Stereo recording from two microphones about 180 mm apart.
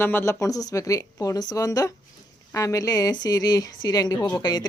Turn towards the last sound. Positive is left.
turn(degrees=20)  # may be behind; listen again after turning